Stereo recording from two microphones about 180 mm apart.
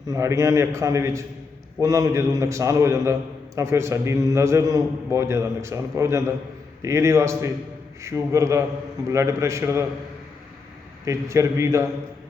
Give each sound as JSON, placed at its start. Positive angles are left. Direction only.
{"t": 0.1, "sound": "a man's voice", "side_deg": -15}
{"t": 11.0, "sound": "a man's voice", "side_deg": -15}